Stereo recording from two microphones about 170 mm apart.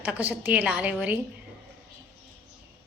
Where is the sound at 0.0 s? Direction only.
10° right (ahead or behind).